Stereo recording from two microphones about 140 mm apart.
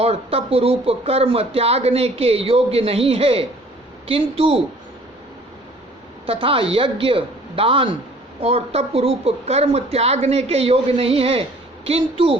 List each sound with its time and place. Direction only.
0.0 s speech: 45° right (ahead or behind)
6.2 s speech: 40° right (ahead or behind)